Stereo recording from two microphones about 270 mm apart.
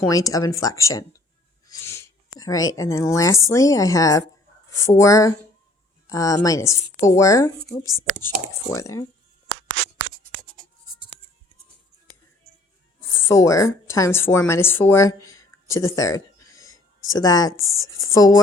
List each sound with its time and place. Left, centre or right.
0.1 s speech: centre
13.1 s speech: centre